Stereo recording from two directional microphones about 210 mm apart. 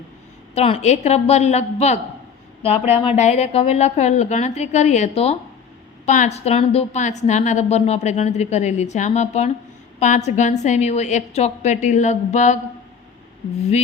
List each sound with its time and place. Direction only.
0.5 s a woman's voice: 30° left (ahead or behind)
13.6 s a woman's voice: 30° left (ahead or behind)